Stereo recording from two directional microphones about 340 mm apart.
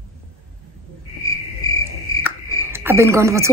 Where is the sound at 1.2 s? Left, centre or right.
Centre.